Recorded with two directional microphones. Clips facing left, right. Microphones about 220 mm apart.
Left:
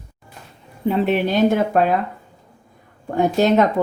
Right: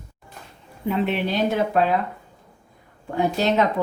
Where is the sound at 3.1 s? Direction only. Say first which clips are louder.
Left 5 dB; 45° left (ahead or behind).